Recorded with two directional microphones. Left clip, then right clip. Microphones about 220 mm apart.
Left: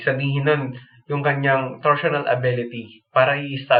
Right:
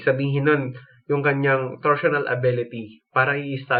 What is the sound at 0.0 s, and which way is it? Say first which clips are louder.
Speech: right 1 dB; 40° right (ahead or behind).